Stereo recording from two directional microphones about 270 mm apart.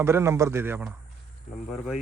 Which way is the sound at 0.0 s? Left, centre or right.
Centre.